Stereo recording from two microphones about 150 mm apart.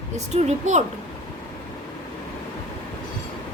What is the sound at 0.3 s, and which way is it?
Speech, 50° right (ahead or behind).